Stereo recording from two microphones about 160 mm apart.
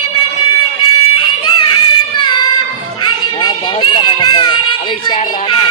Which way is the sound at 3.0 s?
30° left (ahead or behind).